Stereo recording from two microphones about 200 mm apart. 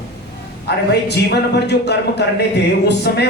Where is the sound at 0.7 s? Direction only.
55° left (ahead or behind).